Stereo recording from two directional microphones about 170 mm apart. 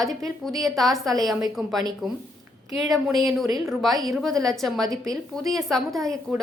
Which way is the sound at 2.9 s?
Centre (ahead or behind).